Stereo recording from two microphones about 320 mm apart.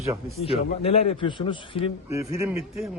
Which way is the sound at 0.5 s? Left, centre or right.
Centre.